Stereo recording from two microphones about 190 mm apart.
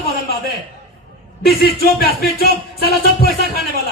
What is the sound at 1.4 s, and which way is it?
Speech, 55° left (ahead or behind).